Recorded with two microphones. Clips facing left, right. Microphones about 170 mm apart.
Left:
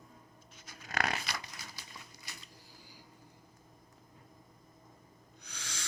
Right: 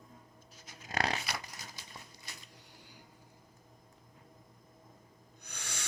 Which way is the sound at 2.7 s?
65° right (ahead or behind).